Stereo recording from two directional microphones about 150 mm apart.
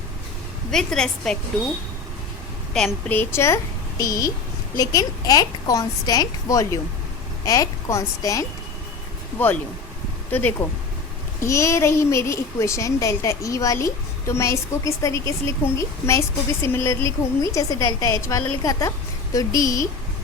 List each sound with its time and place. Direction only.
0.7 s a woman's voice: 5° left (ahead or behind)
2.7 s a woman's voice: 5° left (ahead or behind)
3.2 s a child's voice: 15° left (ahead or behind)
10.6 s a child's voice: 15° left (ahead or behind)